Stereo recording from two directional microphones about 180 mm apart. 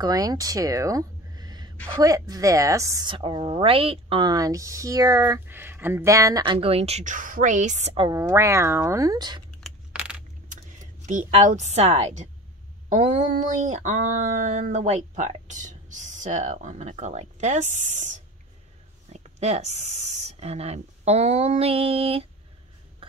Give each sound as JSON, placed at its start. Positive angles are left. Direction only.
{"t": 0.0, "sound": "a woman's voice", "side_deg": -20}
{"t": 8.1, "sound": "speech", "side_deg": -15}
{"t": 9.6, "sound": "coin", "side_deg": -5}
{"t": 10.5, "sound": "speech", "side_deg": -45}
{"t": 12.9, "sound": "a sound", "side_deg": -45}
{"t": 19.1, "sound": "speech", "side_deg": -35}